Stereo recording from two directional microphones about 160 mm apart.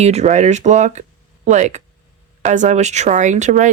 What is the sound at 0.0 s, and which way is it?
Speech, 45° right (ahead or behind).